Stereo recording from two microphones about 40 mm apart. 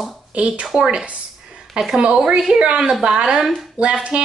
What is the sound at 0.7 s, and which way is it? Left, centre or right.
A woman's voice, centre.